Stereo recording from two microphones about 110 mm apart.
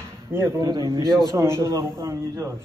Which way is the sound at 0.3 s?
25° right (ahead or behind).